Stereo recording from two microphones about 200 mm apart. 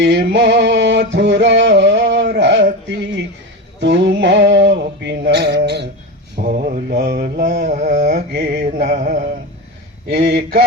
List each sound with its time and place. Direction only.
0.0 s music: 60° right (ahead or behind)
3.8 s male singing: 60° right (ahead or behind)
6.3 s mantra: 50° right (ahead or behind)
10.1 s mantra: 60° right (ahead or behind)